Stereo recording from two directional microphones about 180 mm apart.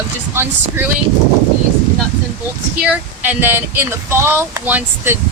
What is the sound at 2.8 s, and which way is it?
Speech, 10° right (ahead or behind).